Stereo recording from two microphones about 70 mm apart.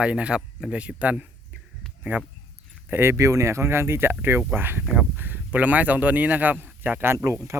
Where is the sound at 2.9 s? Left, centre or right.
Right.